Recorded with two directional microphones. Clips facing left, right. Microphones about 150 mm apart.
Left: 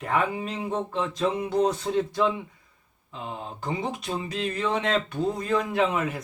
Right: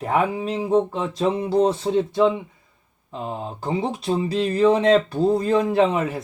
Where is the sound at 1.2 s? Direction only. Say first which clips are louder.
Right 5 dB; 30° right (ahead or behind).